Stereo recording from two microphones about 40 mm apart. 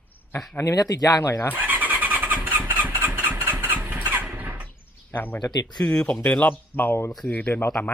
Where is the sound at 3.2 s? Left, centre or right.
Right.